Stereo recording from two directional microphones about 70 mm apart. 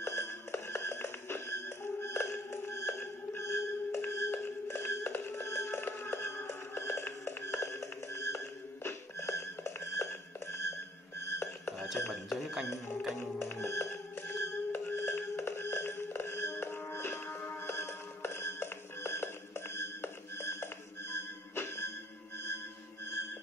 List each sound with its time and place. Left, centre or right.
0.0 s music: left
12.1 s a sound: centre
13.2 s music: left